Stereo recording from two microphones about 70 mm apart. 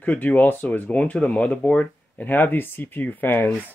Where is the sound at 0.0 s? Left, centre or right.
Left.